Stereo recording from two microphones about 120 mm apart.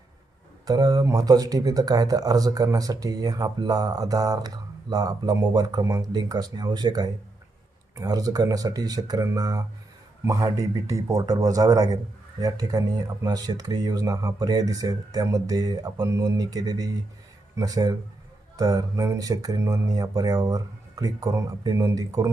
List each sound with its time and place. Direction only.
0.6 s speech: 30° right (ahead or behind)